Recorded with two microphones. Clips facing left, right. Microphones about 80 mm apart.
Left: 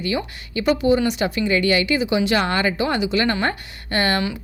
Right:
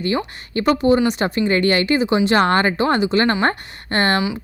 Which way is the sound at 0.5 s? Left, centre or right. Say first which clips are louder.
Right 2 dB; right.